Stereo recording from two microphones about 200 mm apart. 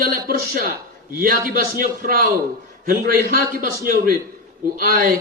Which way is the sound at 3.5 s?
45° right (ahead or behind).